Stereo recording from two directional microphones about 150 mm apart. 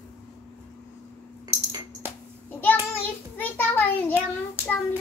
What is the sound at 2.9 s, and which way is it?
Child singing, 15° left (ahead or behind).